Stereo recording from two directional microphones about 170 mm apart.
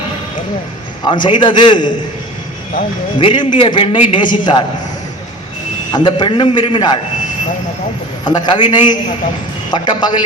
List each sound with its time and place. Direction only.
1.0 s a man's voice: 25° left (ahead or behind)
3.2 s a man's voice: 30° left (ahead or behind)
5.9 s a man's voice: 25° left (ahead or behind)
8.2 s a man's voice: 25° left (ahead or behind)